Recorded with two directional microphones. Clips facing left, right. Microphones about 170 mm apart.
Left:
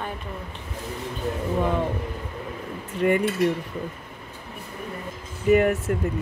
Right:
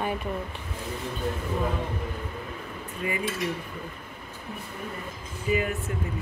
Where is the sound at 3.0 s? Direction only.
55° left (ahead or behind).